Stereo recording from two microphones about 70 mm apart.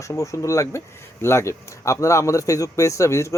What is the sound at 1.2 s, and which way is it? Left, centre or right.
Speech, left.